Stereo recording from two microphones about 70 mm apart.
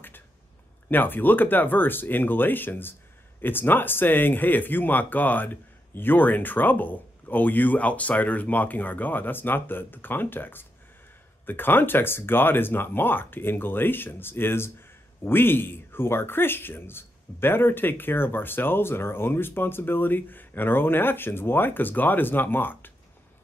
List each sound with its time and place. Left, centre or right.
0.8 s speech: left